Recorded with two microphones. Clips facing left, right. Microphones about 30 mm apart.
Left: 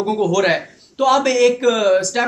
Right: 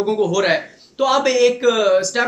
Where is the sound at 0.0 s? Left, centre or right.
Centre.